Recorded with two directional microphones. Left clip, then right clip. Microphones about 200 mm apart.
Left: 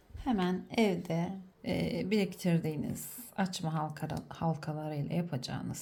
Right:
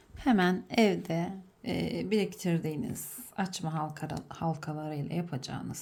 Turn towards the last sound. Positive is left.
turn(degrees=0)  # may be behind; listen again after turning